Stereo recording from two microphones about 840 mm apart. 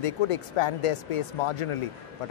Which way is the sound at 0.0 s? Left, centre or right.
Left.